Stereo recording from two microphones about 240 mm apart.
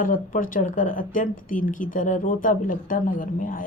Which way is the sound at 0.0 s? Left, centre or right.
Left.